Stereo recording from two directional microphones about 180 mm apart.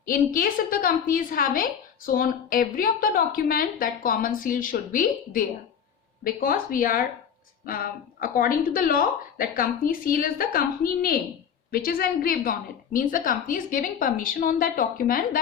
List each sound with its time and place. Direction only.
0.0 s a woman's voice: 50° left (ahead or behind)